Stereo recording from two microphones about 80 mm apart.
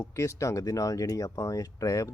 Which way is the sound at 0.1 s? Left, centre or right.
Left.